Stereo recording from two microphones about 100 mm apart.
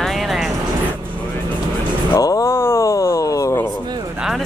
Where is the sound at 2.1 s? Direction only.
35° left (ahead or behind).